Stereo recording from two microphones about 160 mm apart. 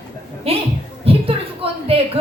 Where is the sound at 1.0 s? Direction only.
35° right (ahead or behind).